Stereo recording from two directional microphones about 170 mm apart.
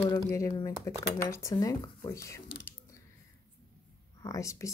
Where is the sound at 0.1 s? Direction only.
20° left (ahead or behind).